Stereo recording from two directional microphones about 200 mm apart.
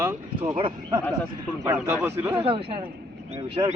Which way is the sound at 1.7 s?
10° right (ahead or behind).